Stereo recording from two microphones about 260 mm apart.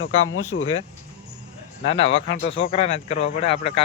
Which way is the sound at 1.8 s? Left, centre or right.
Left.